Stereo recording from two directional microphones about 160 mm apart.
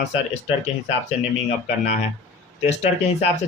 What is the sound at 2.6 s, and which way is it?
Speech, 45° left (ahead or behind).